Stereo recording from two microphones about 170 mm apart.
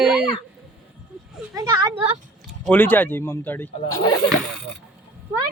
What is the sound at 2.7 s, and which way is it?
Speech, 10° left (ahead or behind).